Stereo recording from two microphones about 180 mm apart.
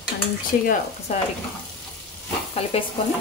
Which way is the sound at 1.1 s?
40° left (ahead or behind).